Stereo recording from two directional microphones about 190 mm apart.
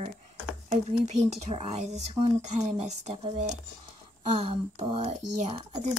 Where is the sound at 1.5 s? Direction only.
35° right (ahead or behind).